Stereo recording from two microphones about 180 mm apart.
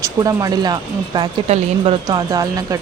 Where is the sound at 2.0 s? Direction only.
20° right (ahead or behind).